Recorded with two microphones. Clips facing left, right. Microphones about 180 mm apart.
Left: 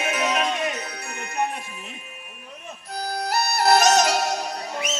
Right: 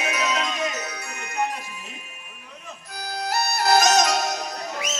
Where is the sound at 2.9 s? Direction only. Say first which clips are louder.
Left 2 dB; 60° left (ahead or behind).